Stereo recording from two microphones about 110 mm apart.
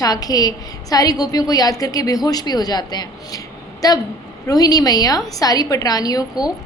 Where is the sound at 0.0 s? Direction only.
35° left (ahead or behind).